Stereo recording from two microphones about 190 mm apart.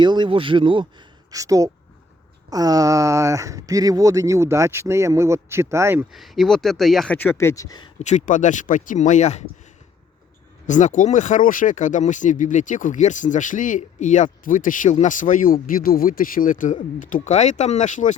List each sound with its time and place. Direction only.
0.0 s speech: 25° right (ahead or behind)
6.1 s speech: centre (ahead or behind); by 7.9 s 20° left (ahead or behind)
7.9 s speech: 40° left (ahead or behind)
10.7 s speech: 40° left (ahead or behind)